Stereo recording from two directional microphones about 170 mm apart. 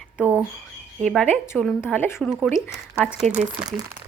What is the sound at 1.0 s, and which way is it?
A woman's voice, centre (ahead or behind).